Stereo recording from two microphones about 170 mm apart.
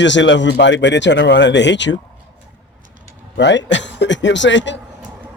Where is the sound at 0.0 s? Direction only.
90° left.